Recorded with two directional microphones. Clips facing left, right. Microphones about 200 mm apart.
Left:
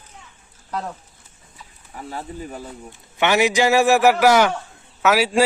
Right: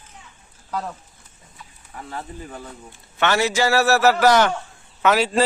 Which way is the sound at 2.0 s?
10° left (ahead or behind).